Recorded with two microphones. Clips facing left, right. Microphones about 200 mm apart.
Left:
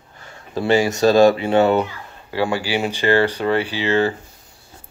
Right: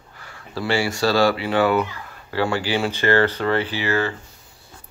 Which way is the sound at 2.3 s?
15° left (ahead or behind).